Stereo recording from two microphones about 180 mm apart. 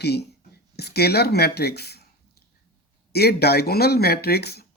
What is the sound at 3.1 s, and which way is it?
Speech, 60° left (ahead or behind).